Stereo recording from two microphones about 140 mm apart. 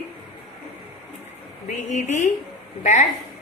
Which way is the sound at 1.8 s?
55° left (ahead or behind).